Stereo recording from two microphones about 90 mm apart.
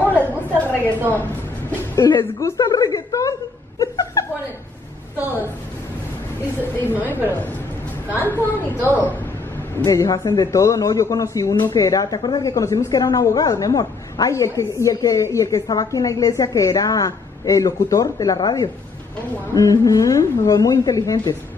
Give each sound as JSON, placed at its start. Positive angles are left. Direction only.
{"t": 0.1, "sound": "chatter", "side_deg": 20}
{"t": 2.0, "sound": "a woman's voice", "side_deg": 50}
{"t": 3.8, "sound": "chuckle", "side_deg": 40}
{"t": 5.1, "sound": "a woman's voice", "side_deg": -20}
{"t": 6.9, "sound": "a woman's voice", "side_deg": -20}
{"t": 8.3, "sound": "a woman's voice", "side_deg": 25}
{"t": 9.8, "sound": "speech", "side_deg": 40}